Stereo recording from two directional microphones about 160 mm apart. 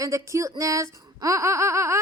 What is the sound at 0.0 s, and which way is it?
Speech, 20° right (ahead or behind).